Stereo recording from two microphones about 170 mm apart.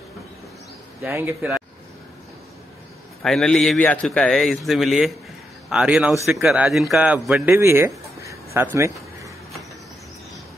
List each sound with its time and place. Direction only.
1.0 s speech: 15° right (ahead or behind)
3.2 s a man's voice: 5° left (ahead or behind); by 9.3 s 15° right (ahead or behind)